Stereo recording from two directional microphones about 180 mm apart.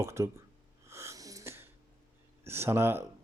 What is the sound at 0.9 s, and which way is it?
Sneeze, 15° right (ahead or behind).